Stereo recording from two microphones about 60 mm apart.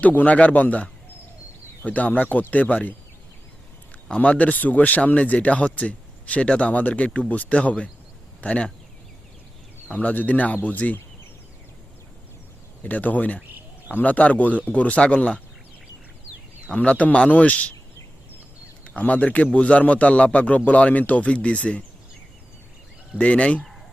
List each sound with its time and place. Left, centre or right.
0.0 s a man's voice: left
4.1 s a man's voice: left
9.9 s a man's voice: left
12.8 s a man's voice: left
16.6 s a man's voice: left
18.9 s a man's voice: left
23.1 s a man's voice: left